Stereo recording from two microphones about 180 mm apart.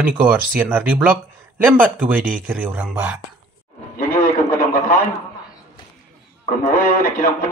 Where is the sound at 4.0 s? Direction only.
55° left (ahead or behind).